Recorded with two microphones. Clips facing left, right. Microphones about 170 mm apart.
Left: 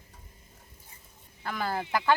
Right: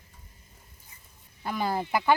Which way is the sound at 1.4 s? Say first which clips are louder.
Right 3 dB; 20° right (ahead or behind).